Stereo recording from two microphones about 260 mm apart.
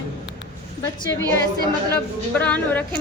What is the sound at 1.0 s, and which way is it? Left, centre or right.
A woman's voice, centre.